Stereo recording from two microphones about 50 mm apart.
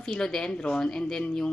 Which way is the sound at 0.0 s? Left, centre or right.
Centre.